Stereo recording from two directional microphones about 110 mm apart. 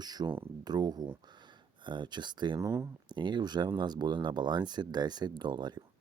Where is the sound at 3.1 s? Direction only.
45° right (ahead or behind).